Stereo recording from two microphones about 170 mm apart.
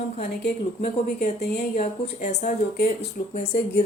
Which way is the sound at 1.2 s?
65° left (ahead or behind).